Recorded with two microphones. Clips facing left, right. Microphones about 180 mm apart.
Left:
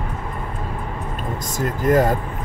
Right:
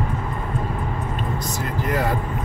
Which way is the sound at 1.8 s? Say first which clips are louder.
Left 7 dB; 45° left (ahead or behind).